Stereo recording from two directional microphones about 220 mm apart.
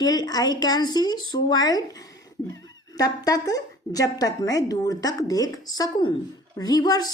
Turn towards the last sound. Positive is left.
turn(degrees=15)  # may be behind; listen again after turning